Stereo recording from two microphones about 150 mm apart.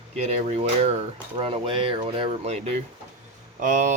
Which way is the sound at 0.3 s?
45° right (ahead or behind).